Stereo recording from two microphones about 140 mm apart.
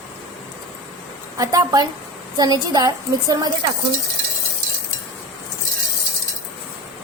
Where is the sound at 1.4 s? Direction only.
25° right (ahead or behind).